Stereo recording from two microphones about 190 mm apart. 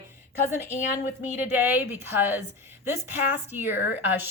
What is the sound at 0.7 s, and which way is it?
Speech, 40° left (ahead or behind).